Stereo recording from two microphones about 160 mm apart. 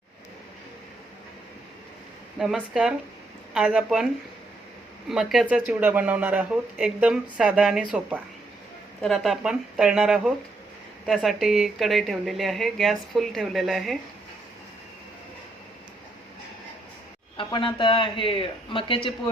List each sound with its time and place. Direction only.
2.4 s speech: 5° right (ahead or behind)
17.3 s speech: 30° left (ahead or behind)